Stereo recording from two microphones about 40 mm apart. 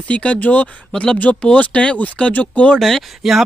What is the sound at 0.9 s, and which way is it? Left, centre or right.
Speech, left.